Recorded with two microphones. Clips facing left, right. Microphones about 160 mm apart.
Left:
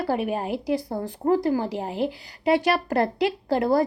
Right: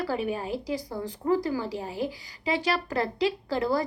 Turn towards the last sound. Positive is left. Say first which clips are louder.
# left 5 dB
turn(degrees=55)  # may be behind; listen again after turning